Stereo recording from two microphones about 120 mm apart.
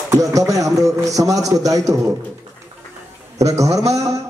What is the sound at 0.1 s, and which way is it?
A man's voice, 30° right (ahead or behind).